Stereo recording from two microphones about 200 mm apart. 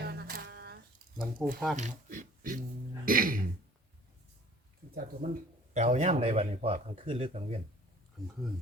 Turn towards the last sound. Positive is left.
turn(degrees=-30)  # may be behind; listen again after turning